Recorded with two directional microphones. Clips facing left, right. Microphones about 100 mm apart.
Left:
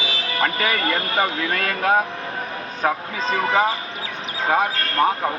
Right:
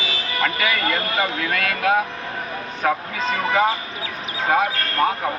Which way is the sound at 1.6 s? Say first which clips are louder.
Right 1 dB; 35° left (ahead or behind).